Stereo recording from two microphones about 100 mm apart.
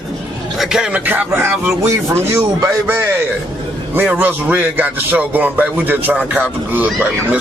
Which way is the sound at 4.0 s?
15° right (ahead or behind).